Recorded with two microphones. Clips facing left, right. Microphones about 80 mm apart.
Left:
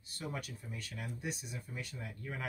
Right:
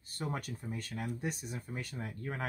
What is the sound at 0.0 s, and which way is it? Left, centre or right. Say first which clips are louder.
Speech: right 4 dB; right.